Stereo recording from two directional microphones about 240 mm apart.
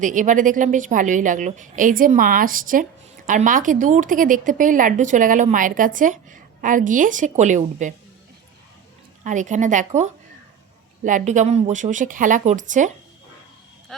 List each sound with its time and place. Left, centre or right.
0.0 s speech: right
9.2 s speech: right